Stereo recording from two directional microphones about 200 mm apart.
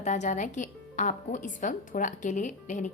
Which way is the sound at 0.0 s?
35° left (ahead or behind).